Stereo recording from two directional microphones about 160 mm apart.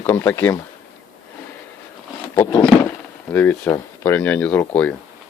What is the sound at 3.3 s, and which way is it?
Speech, 10° left (ahead or behind).